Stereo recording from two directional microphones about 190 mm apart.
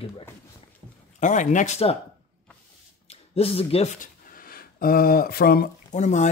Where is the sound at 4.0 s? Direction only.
50° left (ahead or behind).